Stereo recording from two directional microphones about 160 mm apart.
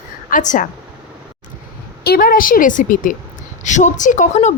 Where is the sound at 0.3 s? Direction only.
55° left (ahead or behind).